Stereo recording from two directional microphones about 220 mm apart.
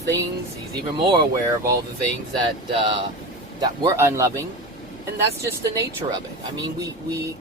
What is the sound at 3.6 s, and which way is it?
Speech, 15° right (ahead or behind).